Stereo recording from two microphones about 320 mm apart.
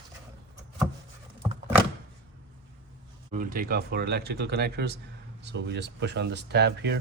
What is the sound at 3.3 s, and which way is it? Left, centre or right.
Speech, right.